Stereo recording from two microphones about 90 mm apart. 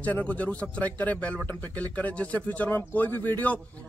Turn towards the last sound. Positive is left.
turn(degrees=20)  # may be behind; listen again after turning